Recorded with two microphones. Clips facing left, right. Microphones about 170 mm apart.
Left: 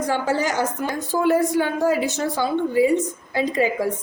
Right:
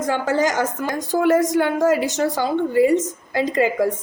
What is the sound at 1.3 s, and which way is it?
A woman's voice, 90° right.